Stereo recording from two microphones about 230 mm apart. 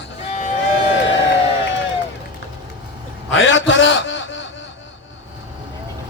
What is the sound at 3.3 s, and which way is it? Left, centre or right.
A man's voice, left.